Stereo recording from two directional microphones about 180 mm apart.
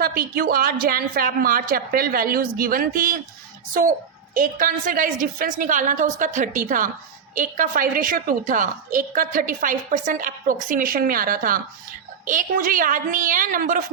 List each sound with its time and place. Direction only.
0.0 s a woman's voice: 55° right (ahead or behind)